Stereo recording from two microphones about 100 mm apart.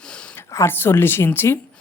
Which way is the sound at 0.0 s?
10° left (ahead or behind).